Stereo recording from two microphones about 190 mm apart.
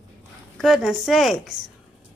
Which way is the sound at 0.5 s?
Centre (ahead or behind).